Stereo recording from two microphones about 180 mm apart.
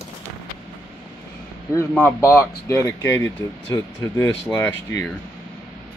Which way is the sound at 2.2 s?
15° left (ahead or behind).